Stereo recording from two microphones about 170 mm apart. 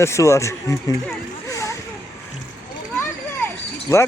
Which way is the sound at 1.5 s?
20° left (ahead or behind).